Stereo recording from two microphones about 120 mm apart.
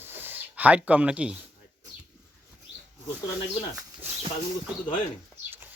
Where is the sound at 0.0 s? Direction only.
15° right (ahead or behind).